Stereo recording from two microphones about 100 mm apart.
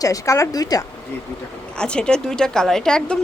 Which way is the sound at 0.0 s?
35° left (ahead or behind).